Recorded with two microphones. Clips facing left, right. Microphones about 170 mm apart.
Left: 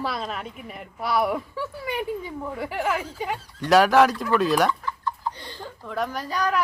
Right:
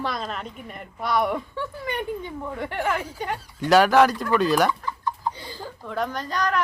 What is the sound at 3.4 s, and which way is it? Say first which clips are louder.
Speech: right 3 dB; 10° right (ahead or behind).